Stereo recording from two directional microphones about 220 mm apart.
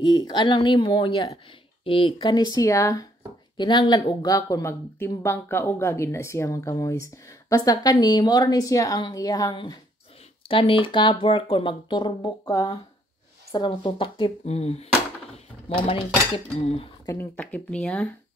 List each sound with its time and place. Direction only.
0.0 s speech: 20° left (ahead or behind)
15.3 s a sound: 25° left (ahead or behind)
16.6 s speech: 25° left (ahead or behind)
17.1 s speech: 10° left (ahead or behind)